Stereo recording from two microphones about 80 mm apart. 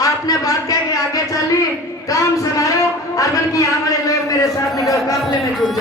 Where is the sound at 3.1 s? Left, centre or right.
Left.